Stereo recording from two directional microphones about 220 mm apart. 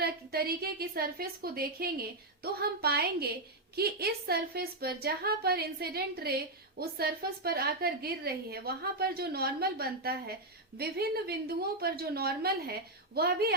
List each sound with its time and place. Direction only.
0.0 s a woman's voice: 45° right (ahead or behind)